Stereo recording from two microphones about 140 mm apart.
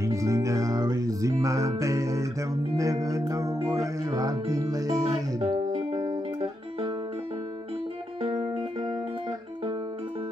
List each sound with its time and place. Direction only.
0.0 s music: 20° right (ahead or behind)
5.4 s music: 35° right (ahead or behind)